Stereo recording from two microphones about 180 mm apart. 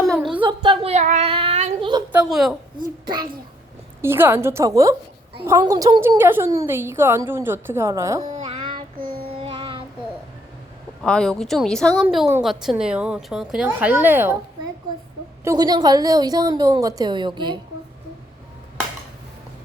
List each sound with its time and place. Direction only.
0.1 s a sound: centre (ahead or behind)
0.4 s a sound: 25° right (ahead or behind)
2.1 s a woman's voice: centre (ahead or behind)
4.0 s a woman's voice: 10° right (ahead or behind)
8.3 s a sound: 30° right (ahead or behind)
9.0 s child singing: 55° right (ahead or behind)
9.2 s child singing: 30° right (ahead or behind)
11.0 s a woman's voice: 5° left (ahead or behind)
15.4 s a woman's voice: 20° right (ahead or behind)